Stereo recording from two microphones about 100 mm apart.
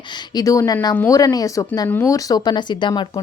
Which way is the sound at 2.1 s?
40° left (ahead or behind).